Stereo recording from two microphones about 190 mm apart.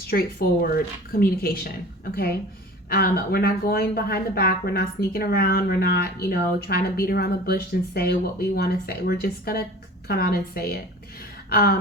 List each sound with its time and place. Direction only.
0.1 s speech: 55° left (ahead or behind)
2.9 s a woman's voice: 55° left (ahead or behind)